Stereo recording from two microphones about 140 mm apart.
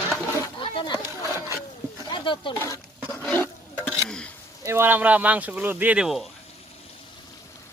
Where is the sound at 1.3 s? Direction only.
20° right (ahead or behind).